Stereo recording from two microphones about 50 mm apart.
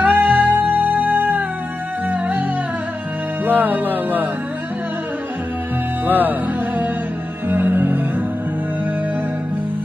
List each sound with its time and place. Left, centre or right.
0.0 s music: right
3.4 s music: right
6.0 s speech: right
7.4 s music: right